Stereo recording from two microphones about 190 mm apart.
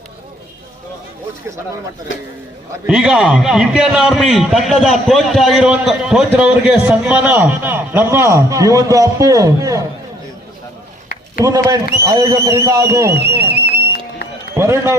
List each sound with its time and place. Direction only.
2.8 s a man's voice: 5° right (ahead or behind)
11.4 s speech: 20° right (ahead or behind)
14.5 s a man's voice: 15° right (ahead or behind)